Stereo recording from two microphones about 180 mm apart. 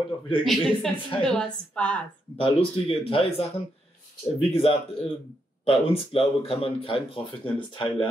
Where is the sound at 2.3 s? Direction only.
30° left (ahead or behind).